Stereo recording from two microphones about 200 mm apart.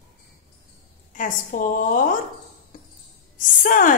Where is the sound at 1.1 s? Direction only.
45° left (ahead or behind).